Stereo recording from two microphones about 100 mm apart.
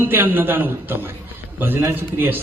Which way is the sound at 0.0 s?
20° right (ahead or behind).